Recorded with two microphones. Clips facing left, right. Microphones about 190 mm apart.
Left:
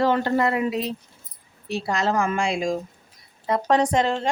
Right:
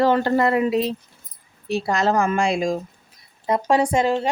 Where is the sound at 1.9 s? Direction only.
45° right (ahead or behind).